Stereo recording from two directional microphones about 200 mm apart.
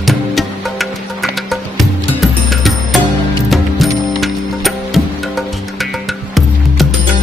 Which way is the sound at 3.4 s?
Centre (ahead or behind).